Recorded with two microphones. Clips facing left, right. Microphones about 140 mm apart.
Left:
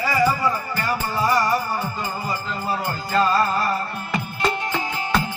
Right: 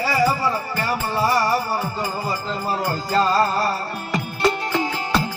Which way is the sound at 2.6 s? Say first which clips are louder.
Right 1 dB; 10° right (ahead or behind).